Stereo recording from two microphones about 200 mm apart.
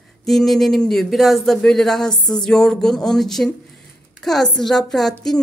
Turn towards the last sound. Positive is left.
turn(degrees=0)  # may be behind; listen again after turning